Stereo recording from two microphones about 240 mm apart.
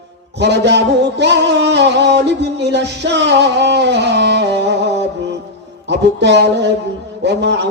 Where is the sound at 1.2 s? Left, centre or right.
Right.